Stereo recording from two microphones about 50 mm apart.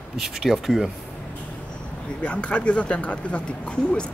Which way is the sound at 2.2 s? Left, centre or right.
Left.